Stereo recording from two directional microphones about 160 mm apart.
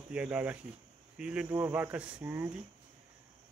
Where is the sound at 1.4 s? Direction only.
20° right (ahead or behind).